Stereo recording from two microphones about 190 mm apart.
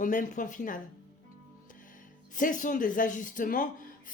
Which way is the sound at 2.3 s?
45° left (ahead or behind).